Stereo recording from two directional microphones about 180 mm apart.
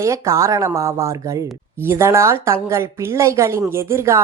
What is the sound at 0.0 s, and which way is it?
Speech, 15° right (ahead or behind).